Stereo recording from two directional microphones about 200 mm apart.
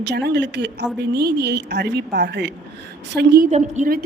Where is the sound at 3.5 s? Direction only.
40° right (ahead or behind).